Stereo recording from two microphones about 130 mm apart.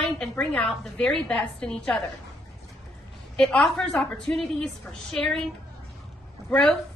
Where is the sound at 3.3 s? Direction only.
5° left (ahead or behind).